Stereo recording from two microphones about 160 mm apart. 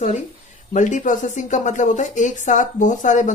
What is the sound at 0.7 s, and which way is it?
Speech, 50° left (ahead or behind).